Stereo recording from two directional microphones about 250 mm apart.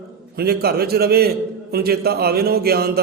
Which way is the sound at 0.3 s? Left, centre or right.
Right.